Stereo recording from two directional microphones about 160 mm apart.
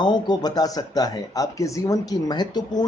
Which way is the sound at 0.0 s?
25° left (ahead or behind).